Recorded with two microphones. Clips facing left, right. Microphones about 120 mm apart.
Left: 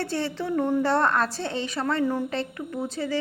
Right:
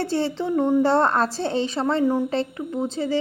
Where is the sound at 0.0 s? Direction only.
30° right (ahead or behind).